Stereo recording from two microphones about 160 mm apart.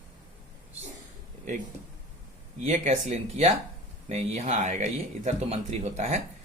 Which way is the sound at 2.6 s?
45° right (ahead or behind).